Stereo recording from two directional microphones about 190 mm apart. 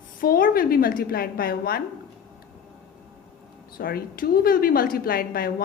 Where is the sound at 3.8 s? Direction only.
50° left (ahead or behind).